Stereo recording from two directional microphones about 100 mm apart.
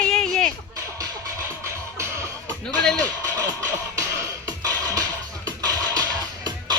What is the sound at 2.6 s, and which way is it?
Speech, 5° left (ahead or behind).